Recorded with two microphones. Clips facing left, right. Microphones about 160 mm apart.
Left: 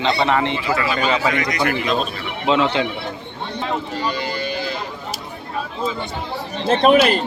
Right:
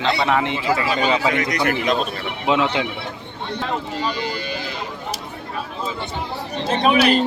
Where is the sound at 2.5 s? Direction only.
5° right (ahead or behind).